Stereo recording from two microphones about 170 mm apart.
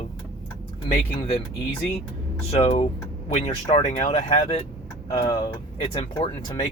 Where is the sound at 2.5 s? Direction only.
35° left (ahead or behind).